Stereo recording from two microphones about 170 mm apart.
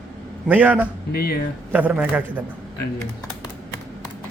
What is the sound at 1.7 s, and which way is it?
Speech, 10° right (ahead or behind).